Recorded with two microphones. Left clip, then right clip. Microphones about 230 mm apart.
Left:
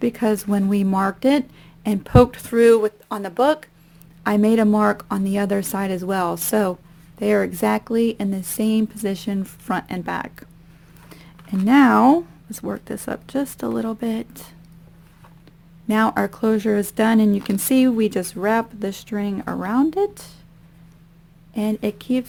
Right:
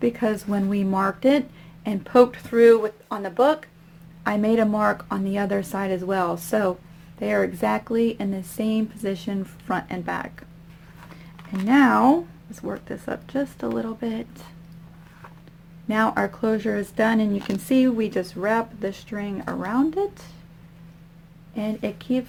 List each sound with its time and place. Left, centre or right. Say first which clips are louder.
0.0 s speech: left 2 dB; left
11.6 s speech: left 3 dB; left
15.9 s speech: left 2 dB; left
21.5 s speech: left 4 dB; left